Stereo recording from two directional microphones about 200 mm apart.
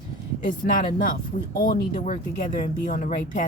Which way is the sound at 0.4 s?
45° left (ahead or behind).